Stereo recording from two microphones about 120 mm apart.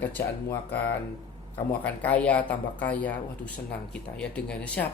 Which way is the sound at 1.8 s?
10° left (ahead or behind).